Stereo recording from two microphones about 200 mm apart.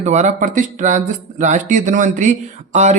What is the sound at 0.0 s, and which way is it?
Speech, 35° right (ahead or behind).